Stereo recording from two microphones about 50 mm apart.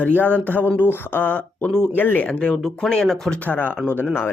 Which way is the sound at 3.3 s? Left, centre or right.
Left.